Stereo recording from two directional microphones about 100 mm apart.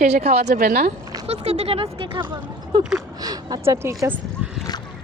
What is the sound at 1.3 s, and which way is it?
Speech, 90° right.